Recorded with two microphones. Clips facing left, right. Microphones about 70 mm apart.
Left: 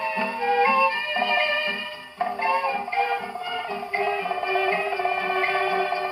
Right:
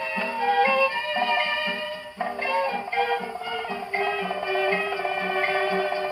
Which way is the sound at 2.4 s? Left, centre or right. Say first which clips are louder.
Left 1 dB; left.